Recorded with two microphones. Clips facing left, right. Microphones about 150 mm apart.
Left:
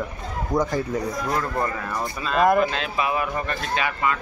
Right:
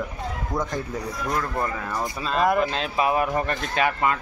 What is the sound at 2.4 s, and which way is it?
Speech, centre (ahead or behind).